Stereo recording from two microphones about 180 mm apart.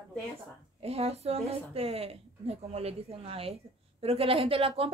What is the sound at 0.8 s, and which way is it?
A woman's voice, 35° right (ahead or behind).